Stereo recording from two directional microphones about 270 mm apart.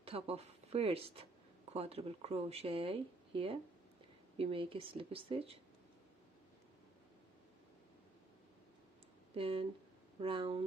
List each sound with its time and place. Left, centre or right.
0.0 s speech: right
9.3 s speech: centre